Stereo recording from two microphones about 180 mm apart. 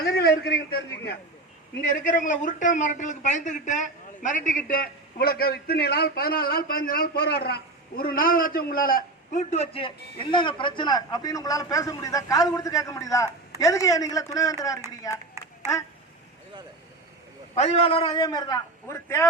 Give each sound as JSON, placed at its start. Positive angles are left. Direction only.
{"t": 0.0, "sound": "a man's voice", "side_deg": 60}
{"t": 1.9, "sound": "a man's voice", "side_deg": 45}
{"t": 15.6, "sound": "a sound", "side_deg": -15}
{"t": 17.5, "sound": "a man's voice", "side_deg": 40}